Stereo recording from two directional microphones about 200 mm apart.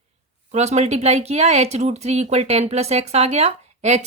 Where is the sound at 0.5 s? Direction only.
35° right (ahead or behind).